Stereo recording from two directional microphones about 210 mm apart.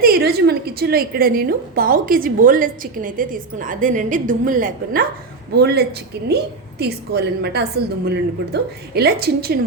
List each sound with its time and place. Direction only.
0.0 s a woman's voice: 45° right (ahead or behind)